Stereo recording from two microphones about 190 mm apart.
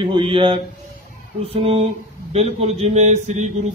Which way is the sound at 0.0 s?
25° right (ahead or behind).